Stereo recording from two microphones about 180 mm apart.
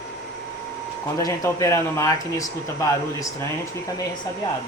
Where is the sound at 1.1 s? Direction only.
15° left (ahead or behind).